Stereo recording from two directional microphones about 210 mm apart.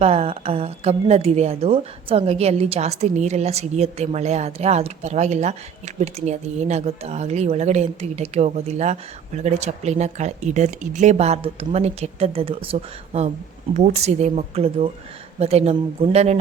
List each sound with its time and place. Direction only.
0.0 s a woman's voice: 30° right (ahead or behind)